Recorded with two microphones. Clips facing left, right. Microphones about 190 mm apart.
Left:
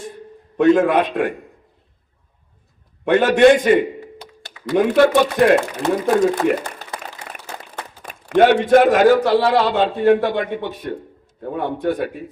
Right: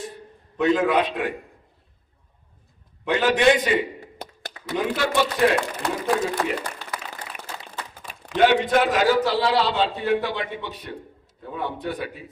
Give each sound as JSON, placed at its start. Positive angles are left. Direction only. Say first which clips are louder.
{"t": 0.5, "sound": "speech", "louder": "left 6 dB", "side_deg": 50}
{"t": 3.0, "sound": "speech", "louder": "left 7 dB", "side_deg": 55}